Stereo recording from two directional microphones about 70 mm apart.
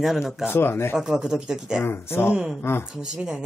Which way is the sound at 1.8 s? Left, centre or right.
Left.